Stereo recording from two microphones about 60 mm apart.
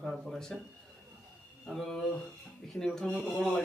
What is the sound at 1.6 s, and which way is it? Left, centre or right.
A man's voice, centre.